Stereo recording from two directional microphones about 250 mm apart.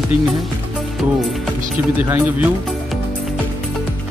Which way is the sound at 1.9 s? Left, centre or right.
Centre.